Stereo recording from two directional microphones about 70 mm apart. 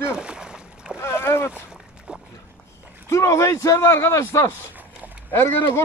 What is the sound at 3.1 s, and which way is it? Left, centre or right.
A man's voice, left.